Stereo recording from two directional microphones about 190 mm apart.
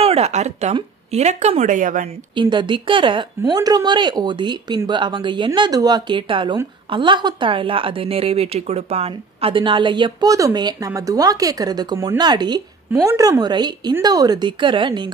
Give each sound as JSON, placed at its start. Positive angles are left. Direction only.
{"t": 0.0, "sound": "speech", "side_deg": -35}
{"t": 2.3, "sound": "a woman's voice", "side_deg": -25}